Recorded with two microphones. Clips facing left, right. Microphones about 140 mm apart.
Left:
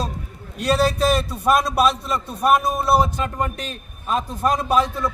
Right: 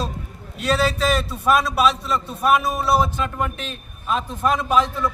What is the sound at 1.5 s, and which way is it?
A man's voice, 40° left (ahead or behind).